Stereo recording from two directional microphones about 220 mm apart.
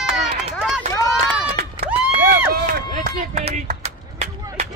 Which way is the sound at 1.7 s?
45° right (ahead or behind).